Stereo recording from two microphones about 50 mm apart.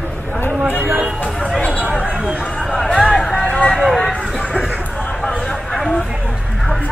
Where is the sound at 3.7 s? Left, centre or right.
Centre.